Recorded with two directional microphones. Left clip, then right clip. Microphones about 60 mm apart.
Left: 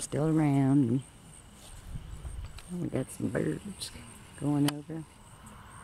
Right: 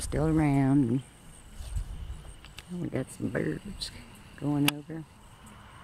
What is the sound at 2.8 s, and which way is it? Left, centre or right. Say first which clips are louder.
Speech: even; centre.